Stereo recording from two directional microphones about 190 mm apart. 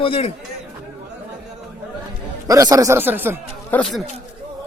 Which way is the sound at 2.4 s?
20° right (ahead or behind).